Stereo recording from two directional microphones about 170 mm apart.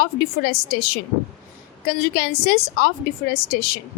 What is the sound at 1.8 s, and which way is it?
A woman's voice, 60° left (ahead or behind).